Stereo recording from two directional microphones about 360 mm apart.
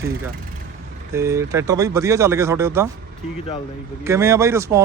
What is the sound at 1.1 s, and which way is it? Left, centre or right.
Speech, centre.